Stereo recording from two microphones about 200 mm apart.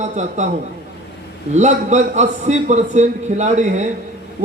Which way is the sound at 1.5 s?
35° right (ahead or behind).